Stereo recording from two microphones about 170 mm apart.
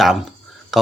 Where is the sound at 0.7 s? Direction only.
Centre (ahead or behind).